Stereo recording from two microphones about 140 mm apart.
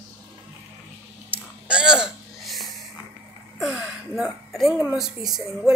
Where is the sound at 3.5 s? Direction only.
5° right (ahead or behind).